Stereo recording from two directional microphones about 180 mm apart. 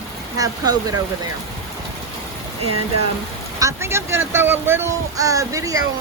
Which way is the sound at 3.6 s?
15° right (ahead or behind).